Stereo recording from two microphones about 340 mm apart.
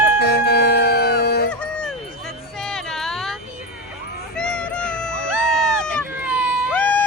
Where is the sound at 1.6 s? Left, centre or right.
Centre.